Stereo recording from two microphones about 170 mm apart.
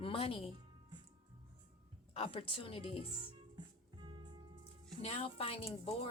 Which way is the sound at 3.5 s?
25° right (ahead or behind).